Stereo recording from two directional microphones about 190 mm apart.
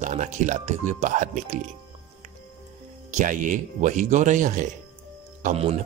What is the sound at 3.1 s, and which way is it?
Speech, 45° right (ahead or behind).